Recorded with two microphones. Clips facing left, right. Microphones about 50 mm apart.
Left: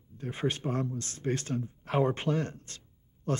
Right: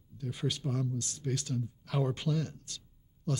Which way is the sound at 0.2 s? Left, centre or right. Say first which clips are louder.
Left 4 dB; left.